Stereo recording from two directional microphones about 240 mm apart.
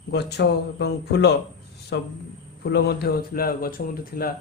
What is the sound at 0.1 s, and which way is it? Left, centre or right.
Speech, left.